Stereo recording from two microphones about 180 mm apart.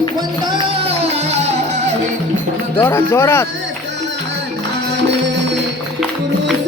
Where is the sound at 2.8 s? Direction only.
15° left (ahead or behind).